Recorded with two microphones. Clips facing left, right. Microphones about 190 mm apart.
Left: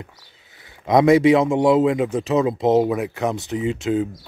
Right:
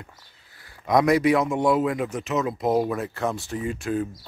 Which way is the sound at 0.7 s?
25° left (ahead or behind).